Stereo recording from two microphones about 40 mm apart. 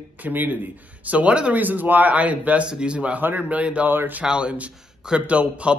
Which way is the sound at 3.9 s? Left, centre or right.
Right.